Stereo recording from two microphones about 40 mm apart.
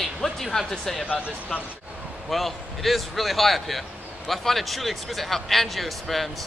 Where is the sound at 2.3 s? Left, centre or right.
Centre.